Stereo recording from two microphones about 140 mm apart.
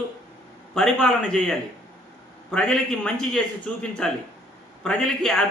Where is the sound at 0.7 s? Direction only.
5° left (ahead or behind).